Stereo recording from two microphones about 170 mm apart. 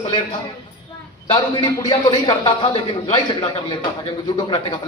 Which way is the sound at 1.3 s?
25° left (ahead or behind).